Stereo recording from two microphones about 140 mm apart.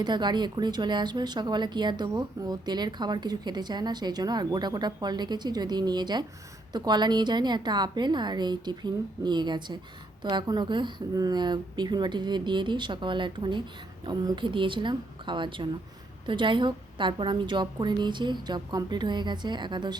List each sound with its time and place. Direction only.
0.0 s speech: 30° right (ahead or behind)